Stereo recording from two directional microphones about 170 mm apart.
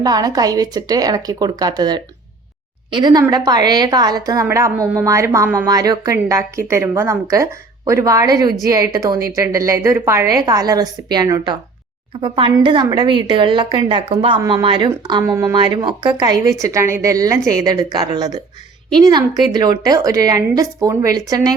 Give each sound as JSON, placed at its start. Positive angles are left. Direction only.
{"t": 0.0, "sound": "a woman's voice", "side_deg": -20}